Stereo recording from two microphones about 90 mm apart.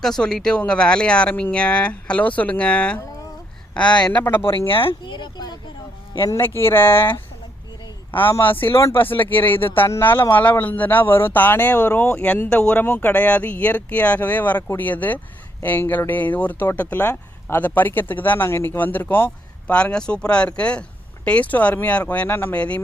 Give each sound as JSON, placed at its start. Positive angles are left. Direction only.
{"t": 0.0, "sound": "speech", "side_deg": 5}
{"t": 4.2, "sound": "speech", "side_deg": 25}
{"t": 4.7, "sound": "speech", "side_deg": 80}
{"t": 6.4, "sound": "speech", "side_deg": 25}
{"t": 8.2, "sound": "speech", "side_deg": 20}
{"t": 12.8, "sound": "speech", "side_deg": 20}